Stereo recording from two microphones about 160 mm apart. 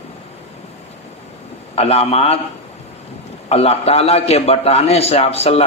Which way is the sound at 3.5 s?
40° left (ahead or behind).